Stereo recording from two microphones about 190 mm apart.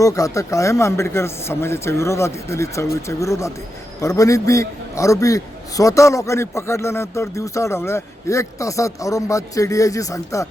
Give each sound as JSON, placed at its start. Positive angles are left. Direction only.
{"t": 0.0, "sound": "a man's voice", "side_deg": 15}